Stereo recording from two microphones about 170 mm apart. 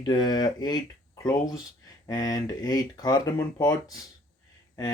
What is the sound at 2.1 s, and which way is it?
Speech, 20° left (ahead or behind).